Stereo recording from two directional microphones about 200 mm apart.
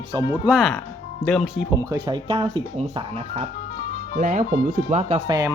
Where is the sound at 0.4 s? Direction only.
Centre (ahead or behind).